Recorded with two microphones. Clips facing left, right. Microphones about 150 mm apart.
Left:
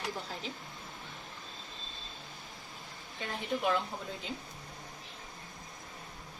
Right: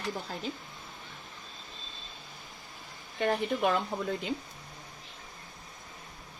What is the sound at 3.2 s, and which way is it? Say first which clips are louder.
Speech: right 7 dB; 70° right (ahead or behind).